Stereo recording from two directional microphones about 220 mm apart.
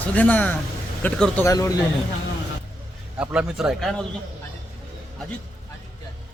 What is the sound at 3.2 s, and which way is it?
Speech, 5° right (ahead or behind).